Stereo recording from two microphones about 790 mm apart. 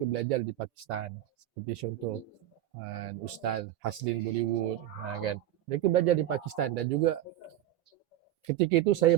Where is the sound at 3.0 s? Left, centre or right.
Right.